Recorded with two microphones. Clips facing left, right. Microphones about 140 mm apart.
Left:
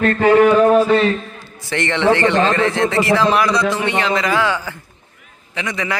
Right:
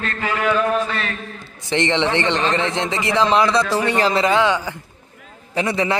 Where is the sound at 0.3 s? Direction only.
45° left (ahead or behind).